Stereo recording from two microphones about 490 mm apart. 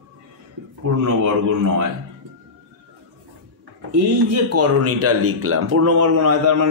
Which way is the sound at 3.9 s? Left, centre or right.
Right.